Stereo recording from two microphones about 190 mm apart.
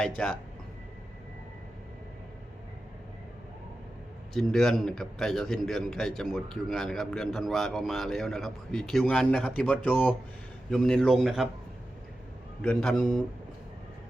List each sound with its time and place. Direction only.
0.2 s a man's voice: 5° left (ahead or behind)
4.4 s a man's voice: centre (ahead or behind)
12.6 s a man's voice: 5° left (ahead or behind)